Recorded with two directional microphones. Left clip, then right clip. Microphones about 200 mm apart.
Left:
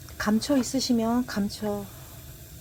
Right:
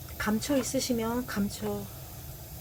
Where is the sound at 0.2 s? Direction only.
20° left (ahead or behind).